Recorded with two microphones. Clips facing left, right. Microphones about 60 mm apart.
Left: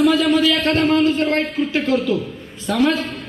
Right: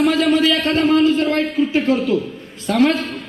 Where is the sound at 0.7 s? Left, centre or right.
Left.